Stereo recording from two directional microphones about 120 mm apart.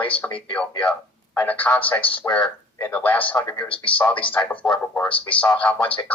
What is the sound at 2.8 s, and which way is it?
Speech, 15° left (ahead or behind).